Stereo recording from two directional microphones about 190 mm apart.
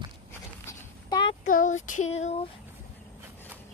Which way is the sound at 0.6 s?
20° left (ahead or behind).